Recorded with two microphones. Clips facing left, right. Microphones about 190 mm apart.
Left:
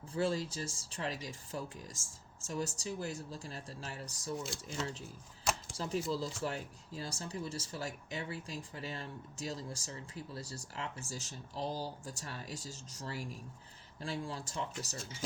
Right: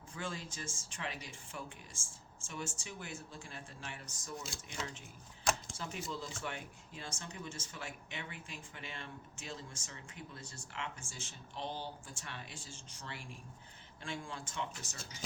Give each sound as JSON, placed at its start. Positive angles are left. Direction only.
{"t": 0.1, "sound": "speech", "side_deg": 35}